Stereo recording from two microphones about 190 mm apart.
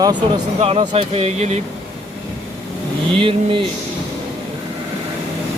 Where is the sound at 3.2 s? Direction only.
30° right (ahead or behind).